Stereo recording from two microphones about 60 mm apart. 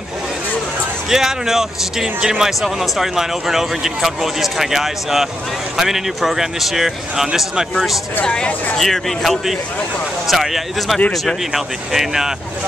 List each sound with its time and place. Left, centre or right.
1.1 s speech: centre
8.2 s speech: centre
8.7 s speech: centre